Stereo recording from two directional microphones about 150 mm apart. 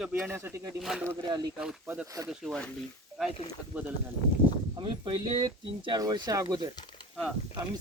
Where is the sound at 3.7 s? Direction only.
15° right (ahead or behind).